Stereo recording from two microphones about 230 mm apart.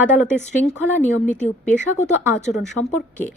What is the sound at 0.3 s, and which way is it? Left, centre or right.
Speech, left.